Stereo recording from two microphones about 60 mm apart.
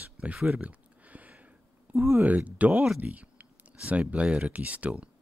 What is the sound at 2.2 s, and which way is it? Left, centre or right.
Speech, right.